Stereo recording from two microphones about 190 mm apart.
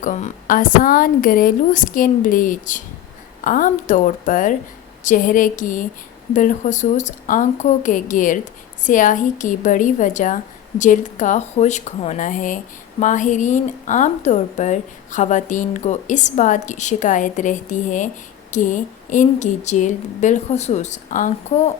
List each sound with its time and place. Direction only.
0.0 s a woman's voice: 40° left (ahead or behind)